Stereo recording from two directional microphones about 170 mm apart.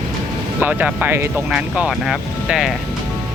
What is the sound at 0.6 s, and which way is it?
Speech, 10° right (ahead or behind).